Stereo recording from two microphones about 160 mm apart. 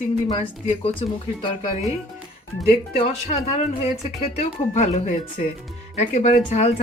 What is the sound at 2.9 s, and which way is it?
Speech, 40° left (ahead or behind).